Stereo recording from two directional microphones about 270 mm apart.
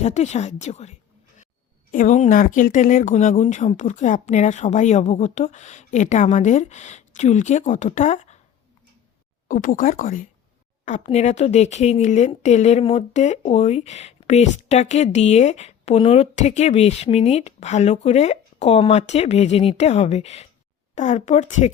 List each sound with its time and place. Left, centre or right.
0.0 s speech: left
9.5 s speech: left